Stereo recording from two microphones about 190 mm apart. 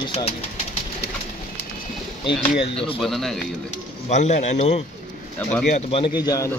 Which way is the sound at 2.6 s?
30° left (ahead or behind).